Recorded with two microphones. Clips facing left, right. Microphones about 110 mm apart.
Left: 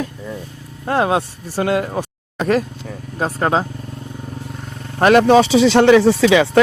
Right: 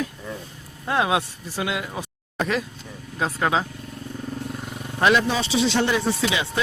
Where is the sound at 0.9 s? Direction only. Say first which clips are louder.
Left 5 dB; 40° left (ahead or behind).